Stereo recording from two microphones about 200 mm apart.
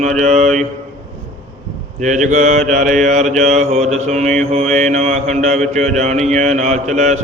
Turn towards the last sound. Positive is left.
turn(degrees=-35)  # may be behind; listen again after turning